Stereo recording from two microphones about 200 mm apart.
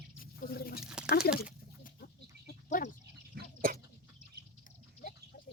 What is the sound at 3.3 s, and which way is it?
Drip, 45° right (ahead or behind).